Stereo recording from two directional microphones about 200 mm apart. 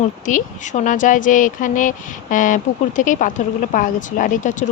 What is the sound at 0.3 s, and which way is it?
Speech, 40° left (ahead or behind).